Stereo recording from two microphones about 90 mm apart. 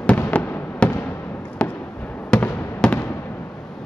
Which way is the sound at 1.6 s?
10° left (ahead or behind).